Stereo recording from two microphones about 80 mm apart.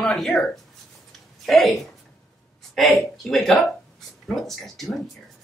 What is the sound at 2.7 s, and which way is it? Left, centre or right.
A woman's voice, centre.